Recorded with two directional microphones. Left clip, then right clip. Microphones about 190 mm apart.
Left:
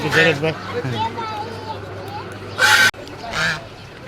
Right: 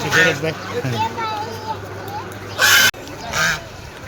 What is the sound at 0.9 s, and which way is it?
Speech, 25° right (ahead or behind).